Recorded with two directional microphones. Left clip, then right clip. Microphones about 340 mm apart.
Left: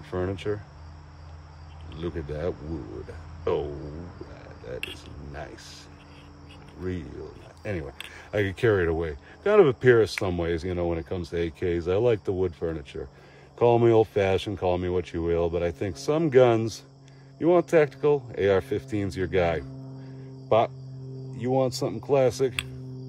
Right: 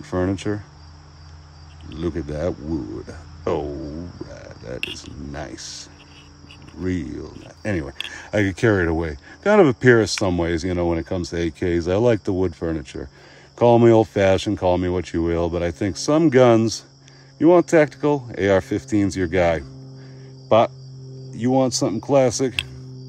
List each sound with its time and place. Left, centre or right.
0.0 s speech: right
1.9 s speech: right
4.6 s speech: right